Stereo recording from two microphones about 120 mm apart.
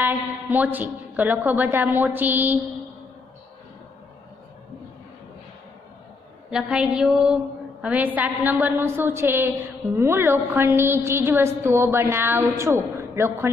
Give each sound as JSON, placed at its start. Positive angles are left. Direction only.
{"t": 0.0, "sound": "a woman's voice", "side_deg": -15}
{"t": 6.5, "sound": "a woman's voice", "side_deg": -5}